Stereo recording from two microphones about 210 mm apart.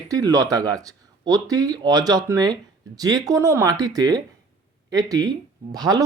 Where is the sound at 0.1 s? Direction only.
15° right (ahead or behind).